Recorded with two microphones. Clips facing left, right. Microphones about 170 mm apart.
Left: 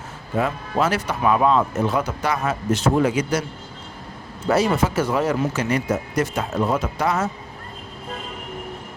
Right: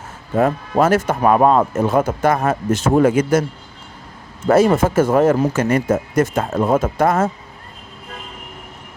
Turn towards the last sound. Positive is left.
turn(degrees=-50)  # may be behind; listen again after turning